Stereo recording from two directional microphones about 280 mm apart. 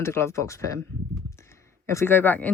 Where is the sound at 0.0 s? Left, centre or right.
Centre.